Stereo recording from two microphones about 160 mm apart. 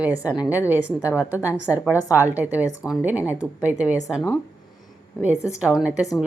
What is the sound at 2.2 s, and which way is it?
A woman's voice, 10° right (ahead or behind).